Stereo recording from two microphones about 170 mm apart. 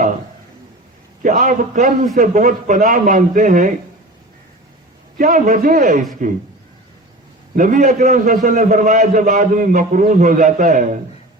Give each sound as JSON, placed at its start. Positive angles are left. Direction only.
{"t": 1.2, "sound": "a man's voice", "side_deg": -50}
{"t": 5.1, "sound": "a man's voice", "side_deg": -55}
{"t": 7.5, "sound": "a man's voice", "side_deg": -50}